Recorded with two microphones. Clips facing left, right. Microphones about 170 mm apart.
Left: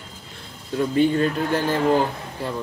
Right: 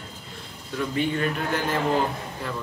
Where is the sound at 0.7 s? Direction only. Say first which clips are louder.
Left 7 dB; 35° left (ahead or behind).